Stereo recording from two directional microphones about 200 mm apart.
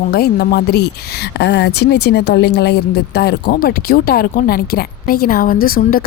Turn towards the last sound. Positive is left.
turn(degrees=45)  # may be behind; listen again after turning